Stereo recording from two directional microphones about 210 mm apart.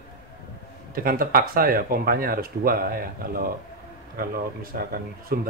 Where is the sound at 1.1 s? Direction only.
45° right (ahead or behind).